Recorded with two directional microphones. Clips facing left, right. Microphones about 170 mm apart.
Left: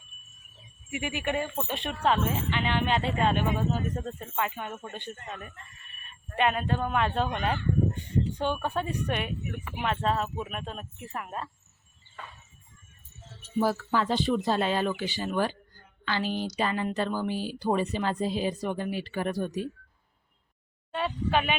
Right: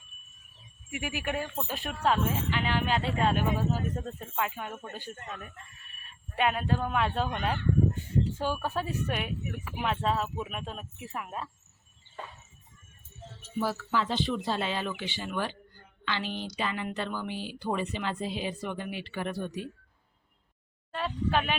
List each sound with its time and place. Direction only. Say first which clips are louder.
0.9 s speech: left 3 dB; centre (ahead or behind)
13.4 s a woman's voice: left 5 dB; 50° left (ahead or behind)
20.9 s speech: left 2 dB; centre (ahead or behind)